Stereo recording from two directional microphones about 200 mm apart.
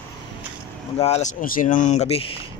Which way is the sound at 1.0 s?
35° left (ahead or behind).